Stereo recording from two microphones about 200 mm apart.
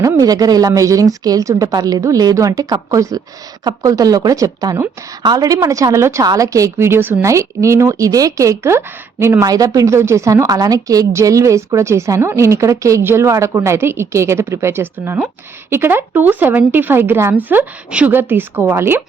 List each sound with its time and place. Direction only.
0.0 s speech: 15° right (ahead or behind)